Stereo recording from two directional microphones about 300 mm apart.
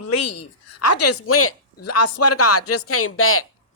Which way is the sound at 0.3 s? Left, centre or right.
Left.